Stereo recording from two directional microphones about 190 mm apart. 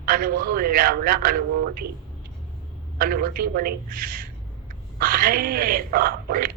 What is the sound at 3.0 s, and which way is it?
A woman's voice, 50° right (ahead or behind).